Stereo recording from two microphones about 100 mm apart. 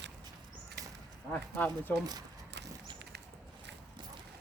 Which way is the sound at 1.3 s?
15° left (ahead or behind).